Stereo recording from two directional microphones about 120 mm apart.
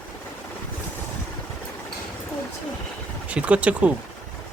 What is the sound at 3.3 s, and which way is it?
Speech, 10° right (ahead or behind).